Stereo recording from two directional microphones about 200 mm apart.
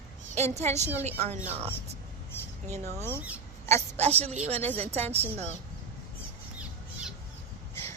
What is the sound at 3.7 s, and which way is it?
Speech, 30° right (ahead or behind).